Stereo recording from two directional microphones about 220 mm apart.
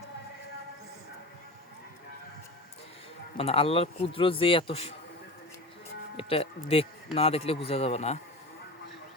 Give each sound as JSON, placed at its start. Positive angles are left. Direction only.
{"t": 3.3, "sound": "speech", "side_deg": 25}
{"t": 6.1, "sound": "speech", "side_deg": 25}